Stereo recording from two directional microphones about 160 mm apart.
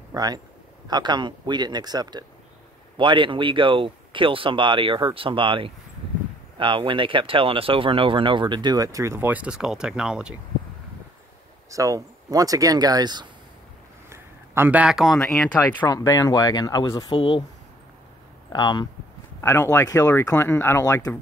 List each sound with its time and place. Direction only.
0.1 s a man's voice: 25° right (ahead or behind); by 10.3 s 5° right (ahead or behind)
11.7 s speech: 20° right (ahead or behind)
14.0 s a man's voice: 15° right (ahead or behind); by 15.9 s 5° left (ahead or behind)
15.9 s speech: 20° left (ahead or behind)
18.5 s speech: 25° left (ahead or behind)
19.4 s speech: 15° left (ahead or behind)